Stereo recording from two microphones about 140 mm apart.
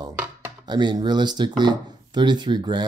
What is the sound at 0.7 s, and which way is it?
Speech, 30° right (ahead or behind).